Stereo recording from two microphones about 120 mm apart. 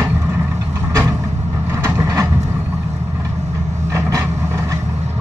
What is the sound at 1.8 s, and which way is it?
Vehicle, 25° right (ahead or behind).